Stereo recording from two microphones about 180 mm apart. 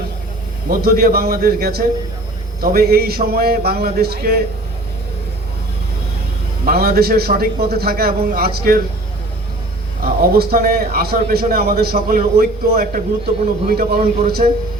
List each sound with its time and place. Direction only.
0.7 s a man's voice: 55° right (ahead or behind)
6.7 s a man's voice: 60° right (ahead or behind)
10.0 s a man's voice: 60° right (ahead or behind)
14.4 s a man's voice: 45° right (ahead or behind)